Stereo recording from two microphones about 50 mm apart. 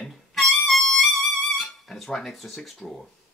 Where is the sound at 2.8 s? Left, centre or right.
Centre.